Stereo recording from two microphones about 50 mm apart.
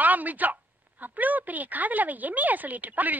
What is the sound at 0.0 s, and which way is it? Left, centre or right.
A woman's voice, right.